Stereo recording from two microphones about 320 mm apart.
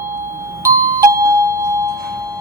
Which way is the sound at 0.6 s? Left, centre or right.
Centre.